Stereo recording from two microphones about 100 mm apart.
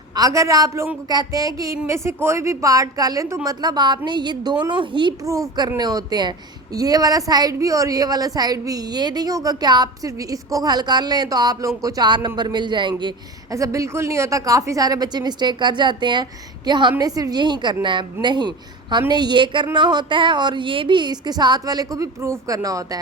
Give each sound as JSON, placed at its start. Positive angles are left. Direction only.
{"t": 0.2, "sound": "a woman's voice", "side_deg": -35}
{"t": 3.6, "sound": "a woman's voice", "side_deg": -45}
{"t": 5.2, "sound": "a woman's voice", "side_deg": -30}
{"t": 13.5, "sound": "a woman's voice", "side_deg": -35}
{"t": 17.0, "sound": "a woman's voice", "side_deg": -40}